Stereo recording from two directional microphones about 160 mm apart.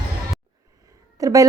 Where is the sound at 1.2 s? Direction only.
20° right (ahead or behind).